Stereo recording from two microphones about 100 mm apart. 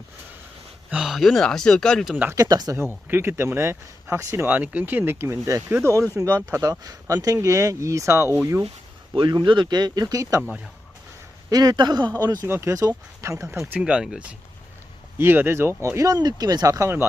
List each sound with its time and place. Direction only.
0.9 s speech: 5° right (ahead or behind)
2.3 s speech: 35° right (ahead or behind)
2.7 s speech: 25° right (ahead or behind)
9.3 s speech: 50° right (ahead or behind); by 10.4 s 35° right (ahead or behind)
11.4 s speech: 40° right (ahead or behind)
13.7 s speech: 10° right (ahead or behind)
15.2 s speech: 20° right (ahead or behind)